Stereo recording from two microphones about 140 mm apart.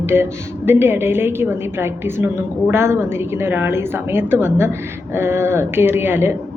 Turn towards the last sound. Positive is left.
turn(degrees=-15)  # may be behind; listen again after turning